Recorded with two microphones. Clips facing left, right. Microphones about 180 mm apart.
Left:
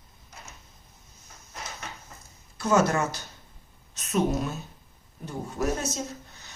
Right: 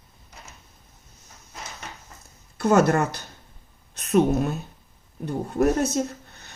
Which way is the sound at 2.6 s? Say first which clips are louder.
Right 4 dB; 60° right (ahead or behind).